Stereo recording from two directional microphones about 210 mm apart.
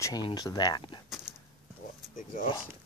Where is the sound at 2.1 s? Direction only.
40° left (ahead or behind).